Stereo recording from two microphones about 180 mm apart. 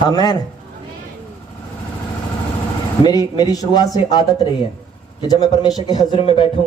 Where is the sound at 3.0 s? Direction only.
20° left (ahead or behind).